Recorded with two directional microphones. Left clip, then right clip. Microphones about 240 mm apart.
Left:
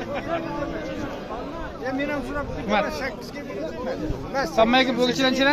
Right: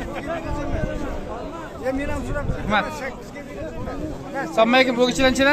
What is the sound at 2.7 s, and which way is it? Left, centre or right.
Speech, centre.